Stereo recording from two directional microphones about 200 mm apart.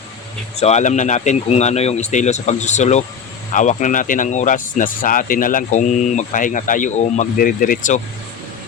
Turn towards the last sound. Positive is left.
turn(degrees=40)  # may be behind; listen again after turning